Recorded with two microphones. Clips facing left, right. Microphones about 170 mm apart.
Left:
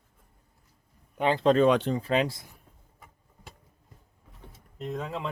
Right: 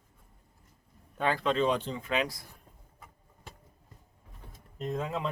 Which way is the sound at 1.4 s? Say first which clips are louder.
Left 9 dB; 40° left (ahead or behind).